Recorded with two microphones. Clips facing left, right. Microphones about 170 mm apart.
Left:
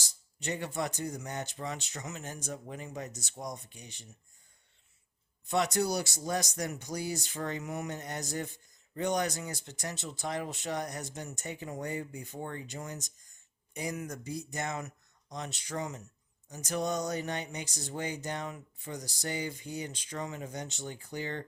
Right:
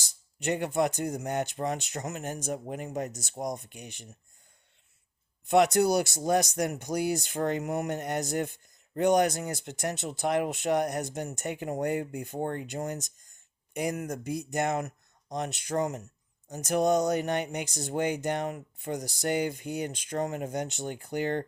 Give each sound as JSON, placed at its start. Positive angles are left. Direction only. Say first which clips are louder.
{"t": 0.4, "sound": "speech", "louder": "right 7 dB", "side_deg": -55}
{"t": 5.5, "sound": "speech", "louder": "right 7 dB", "side_deg": -55}